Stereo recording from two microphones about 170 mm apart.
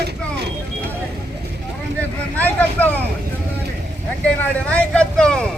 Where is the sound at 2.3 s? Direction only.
10° left (ahead or behind).